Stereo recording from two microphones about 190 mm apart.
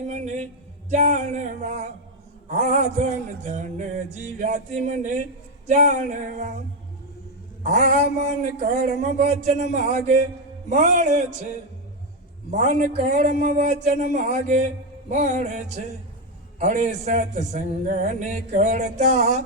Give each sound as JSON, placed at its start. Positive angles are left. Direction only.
{"t": 0.1, "sound": "a sound", "side_deg": -35}
{"t": 0.9, "sound": "speech", "side_deg": -40}
{"t": 5.6, "sound": "speech", "side_deg": -40}
{"t": 7.6, "sound": "speech", "side_deg": -40}
{"t": 12.5, "sound": "speech", "side_deg": -40}